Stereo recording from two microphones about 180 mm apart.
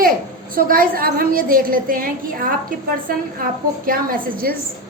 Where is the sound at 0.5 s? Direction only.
55° right (ahead or behind).